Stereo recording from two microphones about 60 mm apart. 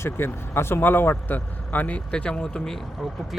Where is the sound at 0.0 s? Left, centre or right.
Left.